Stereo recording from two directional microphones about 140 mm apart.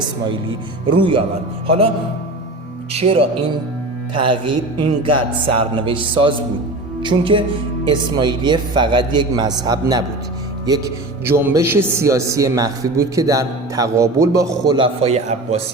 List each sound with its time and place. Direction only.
0.3 s music: 35° right (ahead or behind)
2.9 s speech: 45° right (ahead or behind)
4.1 s music: 35° right (ahead or behind)
9.6 s a man's voice: 30° right (ahead or behind); by 15.6 s 50° right (ahead or behind)